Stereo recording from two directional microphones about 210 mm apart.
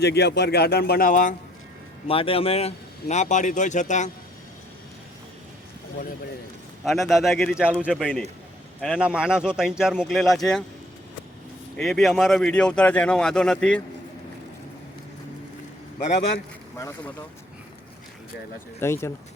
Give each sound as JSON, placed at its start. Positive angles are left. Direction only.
{"t": 0.0, "sound": "a man's voice", "side_deg": 50}
{"t": 2.0, "sound": "a man's voice", "side_deg": 25}
{"t": 6.8, "sound": "speech", "side_deg": 0}
{"t": 11.8, "sound": "speech", "side_deg": 0}
{"t": 18.8, "sound": "speech", "side_deg": 15}